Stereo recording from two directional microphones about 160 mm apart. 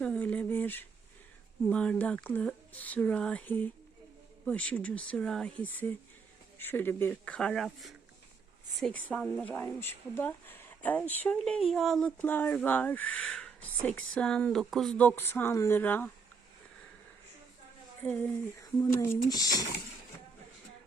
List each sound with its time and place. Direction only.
0.0 s a sound: 10° left (ahead or behind)
1.6 s speech: 5° left (ahead or behind)
18.0 s speech: 15° left (ahead or behind)